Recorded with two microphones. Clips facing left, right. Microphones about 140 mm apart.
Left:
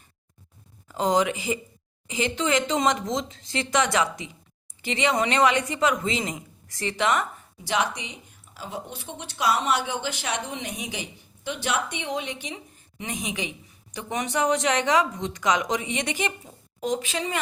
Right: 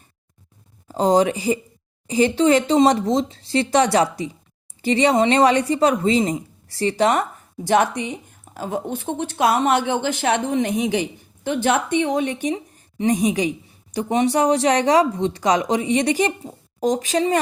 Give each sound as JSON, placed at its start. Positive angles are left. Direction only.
{"t": 0.9, "sound": "a woman's voice", "side_deg": -35}